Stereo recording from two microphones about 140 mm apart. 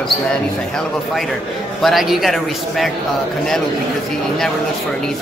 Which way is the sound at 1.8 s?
Centre (ahead or behind).